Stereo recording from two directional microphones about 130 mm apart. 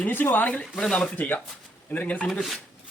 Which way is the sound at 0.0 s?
15° left (ahead or behind).